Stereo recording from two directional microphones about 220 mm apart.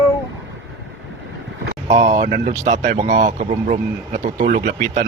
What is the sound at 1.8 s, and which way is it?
Speech, 30° right (ahead or behind).